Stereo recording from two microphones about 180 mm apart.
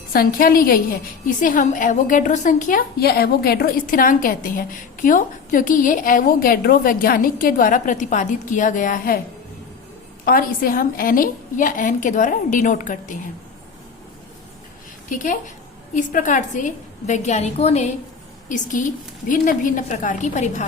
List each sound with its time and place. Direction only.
0.1 s a woman's voice: 55° left (ahead or behind)
10.2 s a woman's voice: 55° left (ahead or behind)
15.1 s a woman's voice: 45° left (ahead or behind)